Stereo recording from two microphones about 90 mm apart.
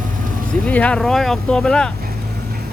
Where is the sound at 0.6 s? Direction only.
15° left (ahead or behind).